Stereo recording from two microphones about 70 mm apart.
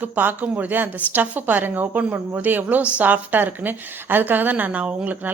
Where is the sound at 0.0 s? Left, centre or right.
Right.